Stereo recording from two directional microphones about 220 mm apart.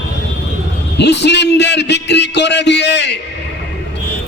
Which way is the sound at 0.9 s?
50° left (ahead or behind).